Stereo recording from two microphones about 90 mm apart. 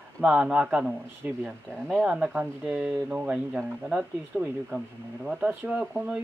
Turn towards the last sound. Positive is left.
turn(degrees=-15)  # may be behind; listen again after turning